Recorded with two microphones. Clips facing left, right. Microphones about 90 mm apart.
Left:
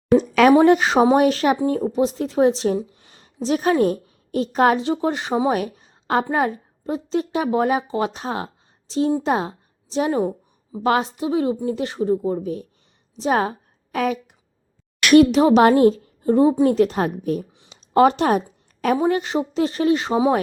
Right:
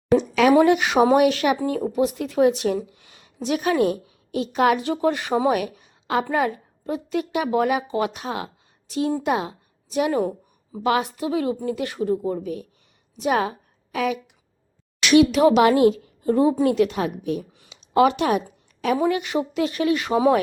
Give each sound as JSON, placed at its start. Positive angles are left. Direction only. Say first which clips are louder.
{"t": 0.2, "sound": "a sound", "louder": "left 3 dB", "side_deg": 45}
{"t": 0.6, "sound": "a woman's voice", "louder": "left 2 dB", "side_deg": 35}
{"t": 1.5, "sound": "a woman's voice", "louder": "left 2 dB", "side_deg": 25}
{"t": 4.8, "sound": "a woman's voice", "louder": "even", "side_deg": 25}
{"t": 5.5, "sound": "a sound", "louder": "left 1 dB", "side_deg": 35}
{"t": 6.2, "sound": "a woman's voice", "louder": "left 1 dB", "side_deg": 25}
{"t": 15.3, "sound": "a woman's voice", "louder": "left 2 dB", "side_deg": 30}
{"t": 17.7, "sound": "a sound", "louder": "left 2 dB", "side_deg": 40}
{"t": 18.9, "sound": "a woman's voice", "louder": "even", "side_deg": 30}